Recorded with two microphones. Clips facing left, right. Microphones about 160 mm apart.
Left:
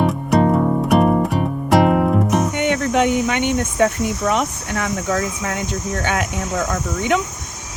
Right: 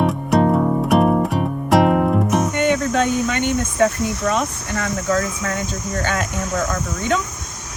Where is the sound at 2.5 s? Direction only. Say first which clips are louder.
Right 1 dB; 20° left (ahead or behind).